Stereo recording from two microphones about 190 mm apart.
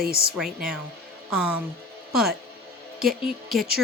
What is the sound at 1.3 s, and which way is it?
Speech, 5° right (ahead or behind).